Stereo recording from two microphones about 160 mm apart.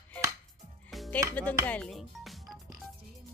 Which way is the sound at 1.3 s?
10° left (ahead or behind).